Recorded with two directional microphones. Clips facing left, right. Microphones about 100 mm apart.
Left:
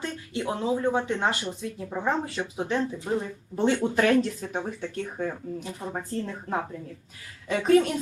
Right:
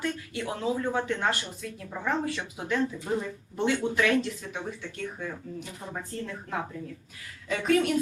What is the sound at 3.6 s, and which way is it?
Speech, 40° left (ahead or behind).